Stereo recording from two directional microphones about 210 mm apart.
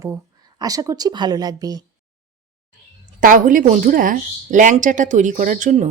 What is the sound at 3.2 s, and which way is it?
Speech, 40° right (ahead or behind).